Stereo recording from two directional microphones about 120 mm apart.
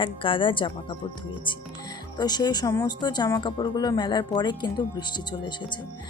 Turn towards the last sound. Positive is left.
turn(degrees=40)  # may be behind; listen again after turning